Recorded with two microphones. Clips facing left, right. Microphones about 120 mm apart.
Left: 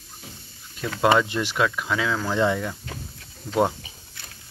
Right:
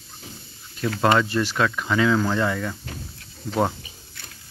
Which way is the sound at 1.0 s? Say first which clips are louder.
Even; 15° left (ahead or behind).